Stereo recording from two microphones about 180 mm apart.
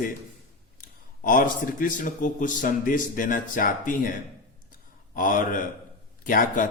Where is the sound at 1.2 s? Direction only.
50° left (ahead or behind).